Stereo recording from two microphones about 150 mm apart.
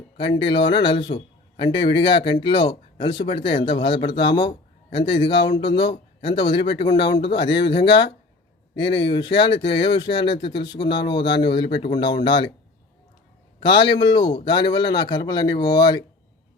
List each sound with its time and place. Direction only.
0.2 s a man's voice: 35° left (ahead or behind)
13.6 s a man's voice: 35° left (ahead or behind)